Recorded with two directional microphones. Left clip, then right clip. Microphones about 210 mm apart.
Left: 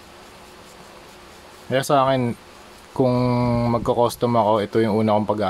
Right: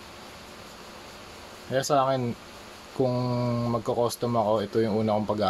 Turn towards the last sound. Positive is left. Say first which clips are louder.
# left 6 dB
turn(degrees=30)  # may be behind; listen again after turning